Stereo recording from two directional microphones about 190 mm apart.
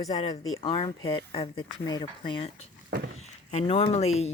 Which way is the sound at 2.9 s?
60° right (ahead or behind).